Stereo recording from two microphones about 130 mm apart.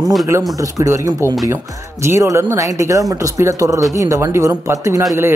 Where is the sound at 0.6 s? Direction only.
25° right (ahead or behind).